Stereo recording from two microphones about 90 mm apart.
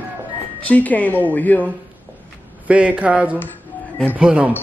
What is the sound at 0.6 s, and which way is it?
Speech, 20° left (ahead or behind).